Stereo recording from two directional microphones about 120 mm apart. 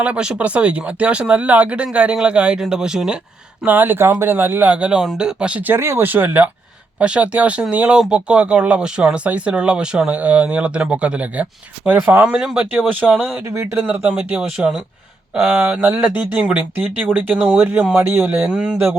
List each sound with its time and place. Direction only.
0.0 s speech: 10° right (ahead or behind)
3.6 s speech: 15° right (ahead or behind)
12.2 s speech: 5° right (ahead or behind)
13.5 s speech: 25° right (ahead or behind)
13.8 s speech: 10° right (ahead or behind)